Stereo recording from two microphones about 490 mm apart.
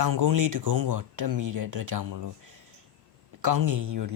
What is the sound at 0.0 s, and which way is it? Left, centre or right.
Speech, right.